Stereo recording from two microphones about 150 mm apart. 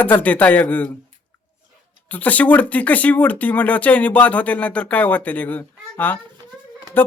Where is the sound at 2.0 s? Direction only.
10° left (ahead or behind).